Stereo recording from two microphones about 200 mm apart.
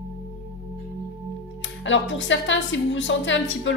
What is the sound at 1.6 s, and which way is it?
A woman's voice, 70° left (ahead or behind).